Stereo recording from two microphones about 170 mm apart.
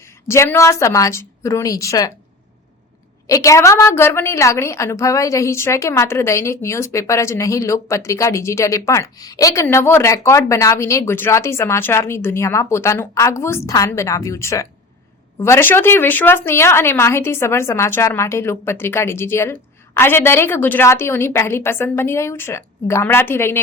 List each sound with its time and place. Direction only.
0.3 s a woman's voice: 15° left (ahead or behind)
3.2 s a woman's voice: 20° left (ahead or behind)